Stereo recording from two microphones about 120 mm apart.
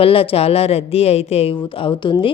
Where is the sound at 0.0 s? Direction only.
50° left (ahead or behind).